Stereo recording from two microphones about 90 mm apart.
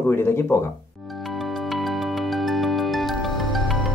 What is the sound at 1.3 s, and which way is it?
Music, centre (ahead or behind).